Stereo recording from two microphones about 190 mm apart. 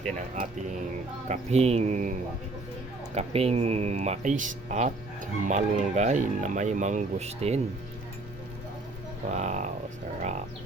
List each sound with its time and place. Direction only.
1.3 s speech: 35° right (ahead or behind)
3.2 s speech: 30° right (ahead or behind)
9.3 s speech: 35° right (ahead or behind)